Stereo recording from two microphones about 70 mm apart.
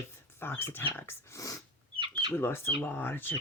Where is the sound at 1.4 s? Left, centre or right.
Left.